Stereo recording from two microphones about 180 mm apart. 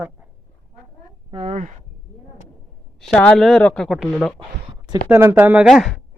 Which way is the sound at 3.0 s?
5° left (ahead or behind).